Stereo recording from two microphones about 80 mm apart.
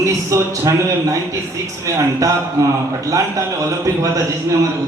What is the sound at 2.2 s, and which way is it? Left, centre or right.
A man's voice, right.